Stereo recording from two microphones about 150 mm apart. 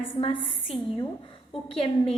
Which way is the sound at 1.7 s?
40° left (ahead or behind).